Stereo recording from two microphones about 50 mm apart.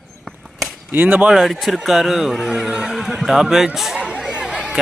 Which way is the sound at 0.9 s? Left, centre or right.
Right.